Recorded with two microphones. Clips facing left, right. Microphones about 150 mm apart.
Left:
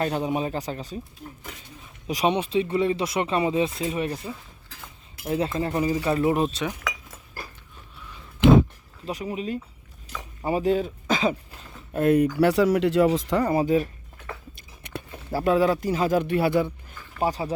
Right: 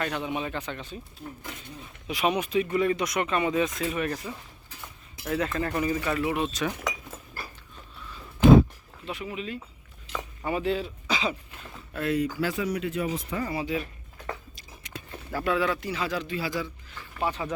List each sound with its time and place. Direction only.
0.0 s speech: 40° left (ahead or behind)
2.0 s speech: 35° left (ahead or behind)
9.0 s speech: 40° left (ahead or behind); by 13.5 s 80° left
13.5 s speech: 45° left (ahead or behind)
14.5 s a sound: 55° left (ahead or behind)
15.3 s speech: 35° left (ahead or behind); by 17.0 s 55° left (ahead or behind)
17.2 s speech: 35° left (ahead or behind)